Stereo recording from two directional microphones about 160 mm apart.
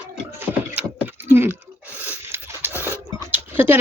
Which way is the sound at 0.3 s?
15° right (ahead or behind).